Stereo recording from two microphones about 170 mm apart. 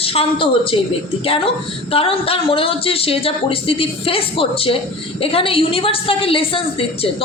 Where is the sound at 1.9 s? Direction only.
35° left (ahead or behind).